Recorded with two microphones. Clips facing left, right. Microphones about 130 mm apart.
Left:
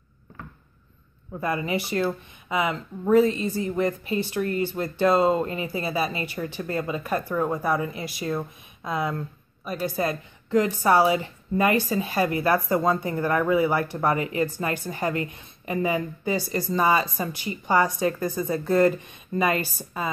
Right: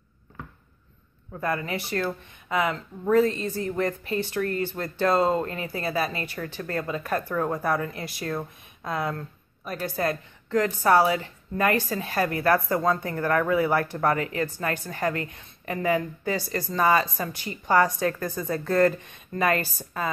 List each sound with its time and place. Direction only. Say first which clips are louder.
1.3 s speech: left 2 dB; 10° left (ahead or behind)